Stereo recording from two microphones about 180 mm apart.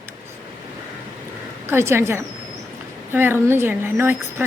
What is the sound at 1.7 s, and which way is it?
A woman's voice, 15° right (ahead or behind).